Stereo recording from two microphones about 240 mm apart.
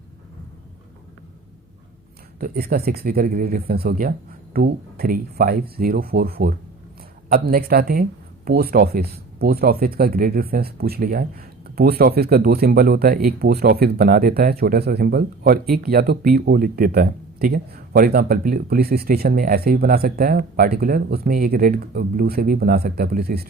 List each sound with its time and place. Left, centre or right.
2.4 s speech: right